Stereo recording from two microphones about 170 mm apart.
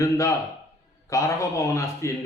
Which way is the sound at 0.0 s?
20° left (ahead or behind).